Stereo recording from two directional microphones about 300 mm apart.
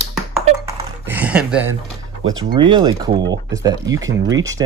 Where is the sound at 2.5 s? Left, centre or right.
Centre.